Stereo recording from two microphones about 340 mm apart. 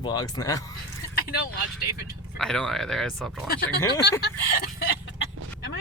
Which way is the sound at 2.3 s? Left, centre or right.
Centre.